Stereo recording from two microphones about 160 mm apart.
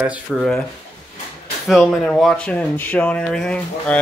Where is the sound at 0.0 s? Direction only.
5° right (ahead or behind).